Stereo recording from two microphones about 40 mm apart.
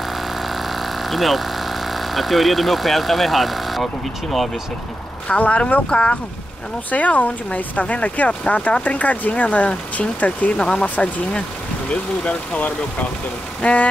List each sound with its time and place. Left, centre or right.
0.1 s engine: centre
5.4 s speech: left
6.9 s speech: left
10.6 s speech: left
13.6 s speech: left